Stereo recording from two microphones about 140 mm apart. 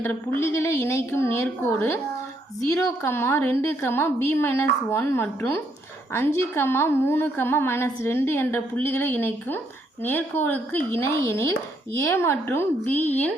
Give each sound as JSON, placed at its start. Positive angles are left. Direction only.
{"t": 0.3, "sound": "a woman's voice", "side_deg": 20}